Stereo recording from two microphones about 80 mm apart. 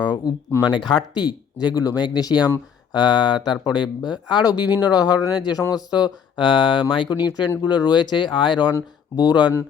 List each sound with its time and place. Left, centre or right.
0.0 s speech: left
2.9 s speech: left
4.8 s speech: left
6.9 s speech: left
9.1 s speech: left